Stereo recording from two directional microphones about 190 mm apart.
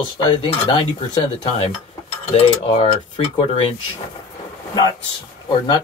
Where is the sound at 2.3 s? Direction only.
30° left (ahead or behind).